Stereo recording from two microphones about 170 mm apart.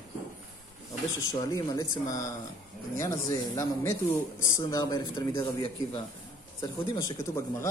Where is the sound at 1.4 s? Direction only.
20° left (ahead or behind).